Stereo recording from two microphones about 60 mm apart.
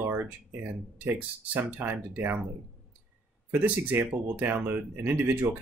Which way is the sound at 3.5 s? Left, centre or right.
Right.